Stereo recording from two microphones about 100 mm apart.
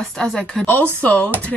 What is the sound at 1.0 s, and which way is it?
Speech, 15° left (ahead or behind).